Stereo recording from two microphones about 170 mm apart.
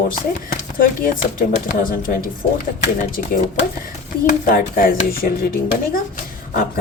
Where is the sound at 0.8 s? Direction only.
55° left (ahead or behind).